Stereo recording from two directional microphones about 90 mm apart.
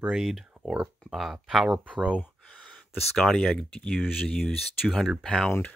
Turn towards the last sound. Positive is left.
turn(degrees=20)  # may be behind; listen again after turning